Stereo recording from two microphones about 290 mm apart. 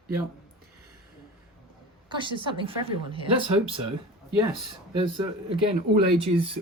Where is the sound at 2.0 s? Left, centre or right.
Centre.